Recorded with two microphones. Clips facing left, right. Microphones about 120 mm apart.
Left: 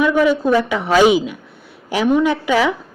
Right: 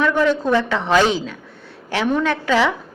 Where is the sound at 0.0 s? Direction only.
10° left (ahead or behind).